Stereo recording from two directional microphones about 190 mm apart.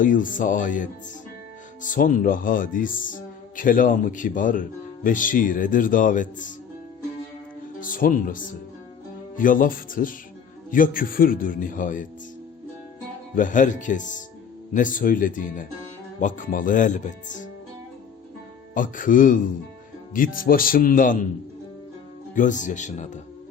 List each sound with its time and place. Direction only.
0.0 s speech: 45° left (ahead or behind)
7.8 s speech: 45° left (ahead or behind)
13.3 s speech: 45° left (ahead or behind)
18.7 s speech: 45° left (ahead or behind)
22.4 s speech: 40° left (ahead or behind)